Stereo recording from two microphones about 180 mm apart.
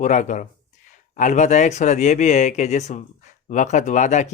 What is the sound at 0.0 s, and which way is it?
Speech, 45° left (ahead or behind).